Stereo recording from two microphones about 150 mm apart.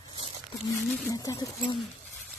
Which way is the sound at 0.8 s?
Centre (ahead or behind).